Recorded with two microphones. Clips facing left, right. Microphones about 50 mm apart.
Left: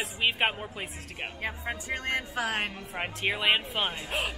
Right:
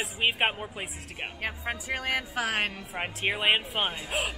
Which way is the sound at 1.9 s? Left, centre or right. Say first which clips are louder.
Right 1 dB; centre.